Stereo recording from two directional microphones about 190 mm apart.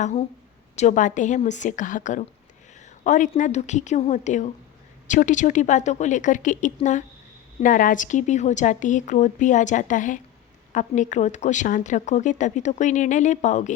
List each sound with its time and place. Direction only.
0.0 s a woman's voice: 35° left (ahead or behind)